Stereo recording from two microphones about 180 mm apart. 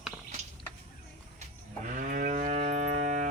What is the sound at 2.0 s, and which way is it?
Moo, 50° right (ahead or behind).